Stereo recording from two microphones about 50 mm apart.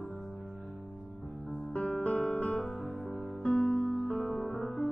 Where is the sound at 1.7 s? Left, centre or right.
Left.